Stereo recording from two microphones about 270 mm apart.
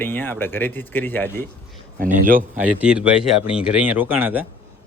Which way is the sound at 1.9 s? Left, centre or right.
Right.